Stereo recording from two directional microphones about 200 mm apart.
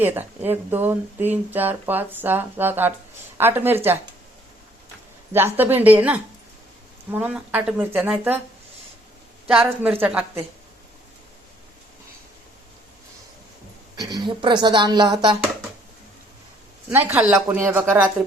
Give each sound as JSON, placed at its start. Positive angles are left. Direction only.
{"t": 0.0, "sound": "speech", "side_deg": -10}
{"t": 5.3, "sound": "speech", "side_deg": -10}
{"t": 9.5, "sound": "speech", "side_deg": -5}
{"t": 14.1, "sound": "speech", "side_deg": -25}
{"t": 16.9, "sound": "speech", "side_deg": -10}